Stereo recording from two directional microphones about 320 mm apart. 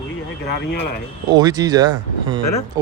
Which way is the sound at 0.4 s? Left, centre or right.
Left.